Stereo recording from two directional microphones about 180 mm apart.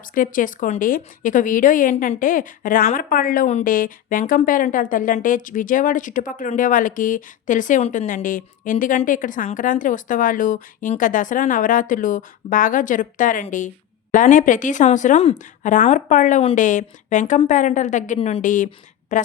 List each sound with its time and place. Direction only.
0.1 s a woman's voice: 50° left (ahead or behind)